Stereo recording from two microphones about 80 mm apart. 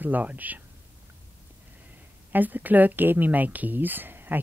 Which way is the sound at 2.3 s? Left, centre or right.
Right.